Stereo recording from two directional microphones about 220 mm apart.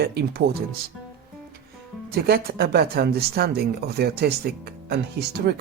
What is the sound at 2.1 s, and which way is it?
Speech, 45° right (ahead or behind).